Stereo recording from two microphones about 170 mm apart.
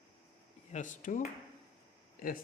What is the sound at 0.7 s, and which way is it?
Speech, 45° left (ahead or behind).